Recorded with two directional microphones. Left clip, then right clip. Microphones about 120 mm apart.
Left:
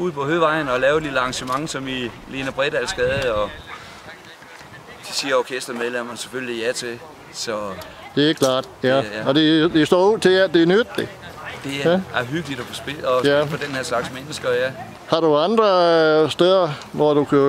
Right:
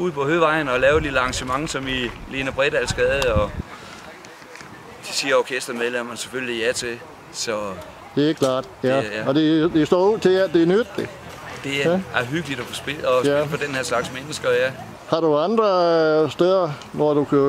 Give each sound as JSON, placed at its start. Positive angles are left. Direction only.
{"t": 0.0, "sound": "speech", "side_deg": 0}
{"t": 5.0, "sound": "speech", "side_deg": 0}
{"t": 8.1, "sound": "speech", "side_deg": 15}
{"t": 11.6, "sound": "speech", "side_deg": 0}
{"t": 13.2, "sound": "speech", "side_deg": 15}
{"t": 13.6, "sound": "speech", "side_deg": -5}
{"t": 15.0, "sound": "speech", "side_deg": 15}